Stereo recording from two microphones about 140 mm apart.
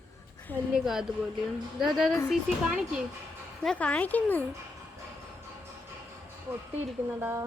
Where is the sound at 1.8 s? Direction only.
Centre (ahead or behind).